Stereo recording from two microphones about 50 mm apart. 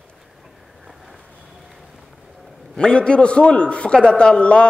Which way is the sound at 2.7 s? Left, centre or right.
Centre.